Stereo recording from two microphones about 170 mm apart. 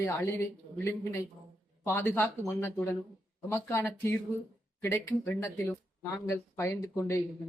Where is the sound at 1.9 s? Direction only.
15° left (ahead or behind).